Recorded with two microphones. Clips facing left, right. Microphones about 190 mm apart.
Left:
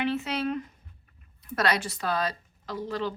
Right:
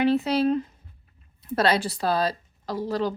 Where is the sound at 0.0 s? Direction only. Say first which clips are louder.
Right 7 dB; 35° right (ahead or behind).